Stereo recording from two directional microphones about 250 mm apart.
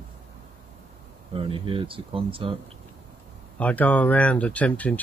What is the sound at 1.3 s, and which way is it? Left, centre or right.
Speech, right.